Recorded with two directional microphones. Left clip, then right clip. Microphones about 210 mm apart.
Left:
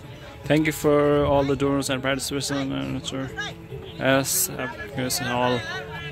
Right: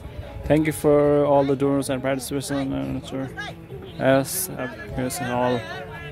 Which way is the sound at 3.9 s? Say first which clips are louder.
Right 2 dB; 10° right (ahead or behind).